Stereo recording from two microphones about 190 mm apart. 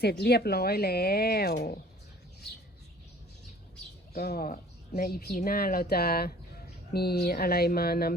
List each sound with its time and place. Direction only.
0.0 s speech: 60° left (ahead or behind)
4.1 s speech: 55° left (ahead or behind)